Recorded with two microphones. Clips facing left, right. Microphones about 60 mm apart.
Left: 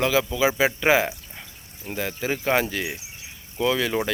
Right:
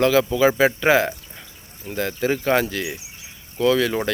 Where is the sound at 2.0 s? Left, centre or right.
Centre.